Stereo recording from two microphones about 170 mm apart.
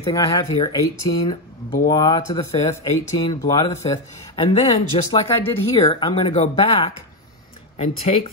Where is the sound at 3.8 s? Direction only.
30° left (ahead or behind).